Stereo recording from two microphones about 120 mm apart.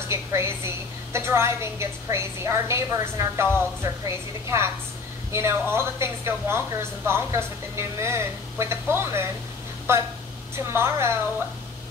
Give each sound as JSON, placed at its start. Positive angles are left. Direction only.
{"t": 0.1, "sound": "a woman's voice", "side_deg": -20}